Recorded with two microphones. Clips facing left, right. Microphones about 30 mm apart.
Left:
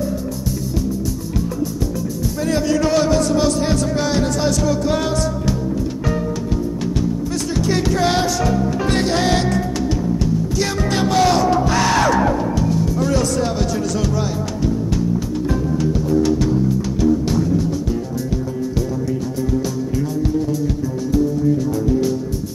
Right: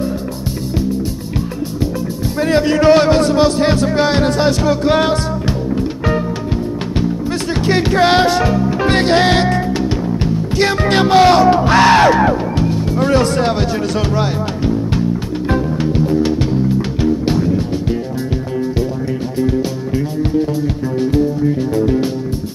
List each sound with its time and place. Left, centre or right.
2.4 s music: right
7.5 s music: right
20.0 s music: right